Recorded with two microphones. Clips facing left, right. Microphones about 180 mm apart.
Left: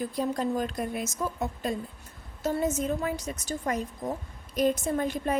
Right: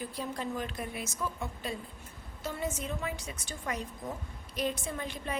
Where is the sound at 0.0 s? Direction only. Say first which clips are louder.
Left 8 dB; 45° left (ahead or behind).